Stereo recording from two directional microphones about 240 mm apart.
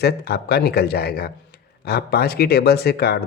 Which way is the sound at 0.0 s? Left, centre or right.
Left.